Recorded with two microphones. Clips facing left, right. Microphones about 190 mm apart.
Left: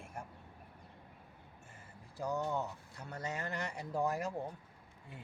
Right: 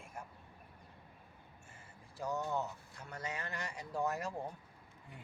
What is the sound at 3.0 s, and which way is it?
Speech, 40° left (ahead or behind).